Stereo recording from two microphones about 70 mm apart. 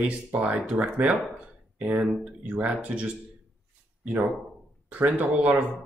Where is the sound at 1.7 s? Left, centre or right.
Right.